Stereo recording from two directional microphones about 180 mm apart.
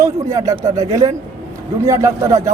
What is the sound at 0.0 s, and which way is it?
Speech, 15° right (ahead or behind).